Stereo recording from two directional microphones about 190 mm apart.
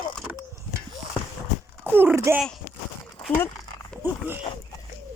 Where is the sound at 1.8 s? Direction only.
10° right (ahead or behind).